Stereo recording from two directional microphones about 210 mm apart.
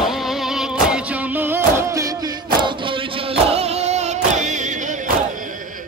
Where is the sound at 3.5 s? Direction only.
30° right (ahead or behind).